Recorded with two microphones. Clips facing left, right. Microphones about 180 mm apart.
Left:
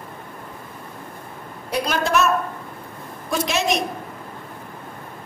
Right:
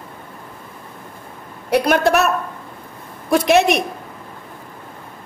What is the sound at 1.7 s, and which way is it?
A woman's voice, 60° right (ahead or behind).